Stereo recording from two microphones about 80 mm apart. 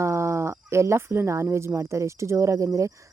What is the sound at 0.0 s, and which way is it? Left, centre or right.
Speech, right.